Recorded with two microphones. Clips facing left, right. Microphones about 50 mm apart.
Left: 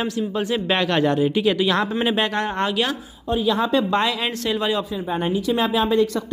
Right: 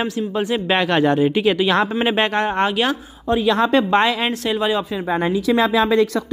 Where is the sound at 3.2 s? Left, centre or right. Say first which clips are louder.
Right 4 dB; right.